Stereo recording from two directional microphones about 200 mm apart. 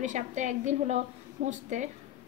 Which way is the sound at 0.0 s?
40° right (ahead or behind).